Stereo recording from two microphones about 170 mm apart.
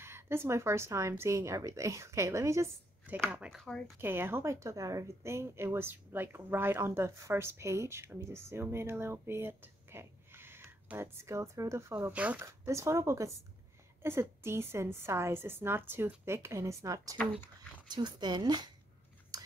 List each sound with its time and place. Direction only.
0.0 s a woman's voice: 15° right (ahead or behind)
3.2 s speech: 5° right (ahead or behind)
4.0 s a woman's voice: 15° right (ahead or behind)
19.3 s a sound: 25° right (ahead or behind)